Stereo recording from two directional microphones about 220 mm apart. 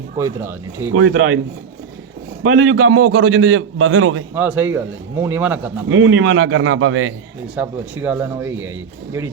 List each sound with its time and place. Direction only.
0.2 s a man's voice: 10° right (ahead or behind)
0.9 s a man's voice: 70° right (ahead or behind)
2.4 s a man's voice: 70° right (ahead or behind)
4.4 s a man's voice: 10° right (ahead or behind)
5.9 s a man's voice: 70° right (ahead or behind)
7.5 s a man's voice: 5° right (ahead or behind)